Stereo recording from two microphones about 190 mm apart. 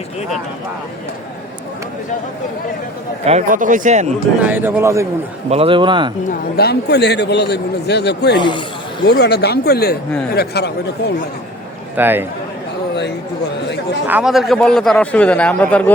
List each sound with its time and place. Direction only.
3.2 s speech: 40° right (ahead or behind)
4.4 s a man's voice: 10° right (ahead or behind)
5.5 s speech: 30° right (ahead or behind)
6.3 s a man's voice: 55° left (ahead or behind)
8.4 s a man's voice: 25° left (ahead or behind)
9.0 s a man's voice: 60° left (ahead or behind)
11.9 s a man's voice: 10° right (ahead or behind)
14.1 s a man's voice: 5° right (ahead or behind)